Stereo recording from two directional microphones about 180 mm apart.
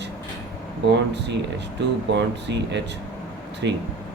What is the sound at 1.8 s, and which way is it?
Speech, 75° right (ahead or behind).